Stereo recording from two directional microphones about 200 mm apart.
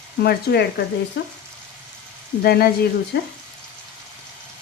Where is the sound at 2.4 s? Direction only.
50° left (ahead or behind).